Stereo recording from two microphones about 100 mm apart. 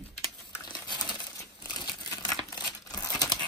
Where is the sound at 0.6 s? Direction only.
45° left (ahead or behind).